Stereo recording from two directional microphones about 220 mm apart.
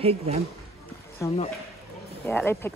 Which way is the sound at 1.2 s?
15° left (ahead or behind).